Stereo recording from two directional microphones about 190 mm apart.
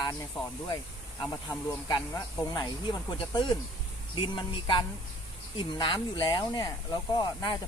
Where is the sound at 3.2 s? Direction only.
25° left (ahead or behind).